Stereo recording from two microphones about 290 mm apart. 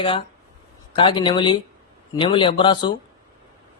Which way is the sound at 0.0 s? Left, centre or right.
Centre.